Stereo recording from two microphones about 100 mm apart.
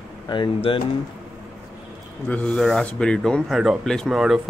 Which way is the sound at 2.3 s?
15° left (ahead or behind).